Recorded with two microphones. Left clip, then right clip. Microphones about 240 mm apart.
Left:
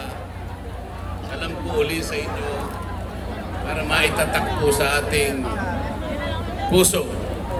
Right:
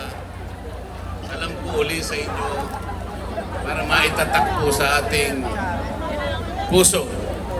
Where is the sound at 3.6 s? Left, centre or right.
Right.